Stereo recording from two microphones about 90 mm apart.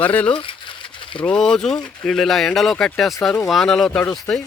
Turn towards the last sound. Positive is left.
turn(degrees=15)  # may be behind; listen again after turning